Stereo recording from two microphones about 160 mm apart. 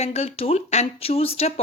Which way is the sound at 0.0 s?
40° left (ahead or behind).